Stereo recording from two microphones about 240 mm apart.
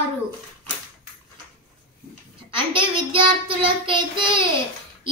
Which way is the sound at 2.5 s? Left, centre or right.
Right.